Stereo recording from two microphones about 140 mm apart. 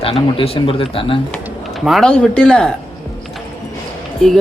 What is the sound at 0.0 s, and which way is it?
Speech, 45° left (ahead or behind).